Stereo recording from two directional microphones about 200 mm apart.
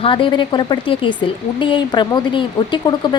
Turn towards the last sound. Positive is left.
turn(degrees=20)  # may be behind; listen again after turning